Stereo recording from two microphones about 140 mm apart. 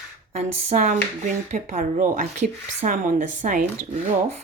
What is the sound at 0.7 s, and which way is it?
Speech, 70° right (ahead or behind).